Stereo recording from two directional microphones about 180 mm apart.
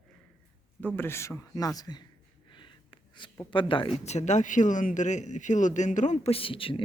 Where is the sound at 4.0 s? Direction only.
40° left (ahead or behind).